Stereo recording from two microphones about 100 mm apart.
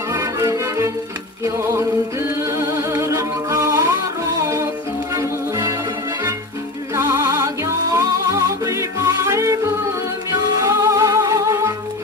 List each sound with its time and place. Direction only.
0.1 s music: 30° right (ahead or behind)
7.0 s music: 30° right (ahead or behind)
10.6 s music: 30° right (ahead or behind)